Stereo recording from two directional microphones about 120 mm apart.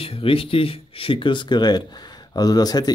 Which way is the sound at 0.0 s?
50° left (ahead or behind).